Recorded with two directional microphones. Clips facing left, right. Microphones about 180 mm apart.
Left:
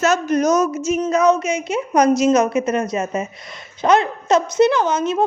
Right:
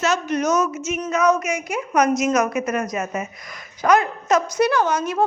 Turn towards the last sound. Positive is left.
turn(degrees=20)  # may be behind; listen again after turning